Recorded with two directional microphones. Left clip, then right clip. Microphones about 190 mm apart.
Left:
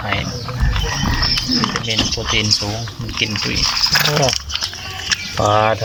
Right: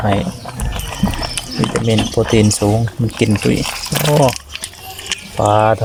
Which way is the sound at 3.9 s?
30° right (ahead or behind).